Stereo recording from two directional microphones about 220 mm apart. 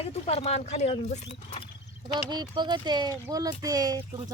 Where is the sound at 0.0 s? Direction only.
25° left (ahead or behind).